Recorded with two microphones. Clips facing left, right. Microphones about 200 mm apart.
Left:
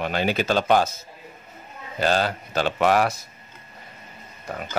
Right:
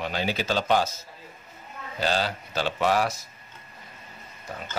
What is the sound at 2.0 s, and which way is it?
Speech, 55° left (ahead or behind).